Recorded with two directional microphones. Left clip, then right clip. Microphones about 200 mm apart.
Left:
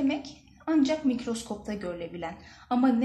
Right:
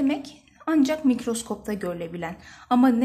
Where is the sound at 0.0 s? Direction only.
45° right (ahead or behind).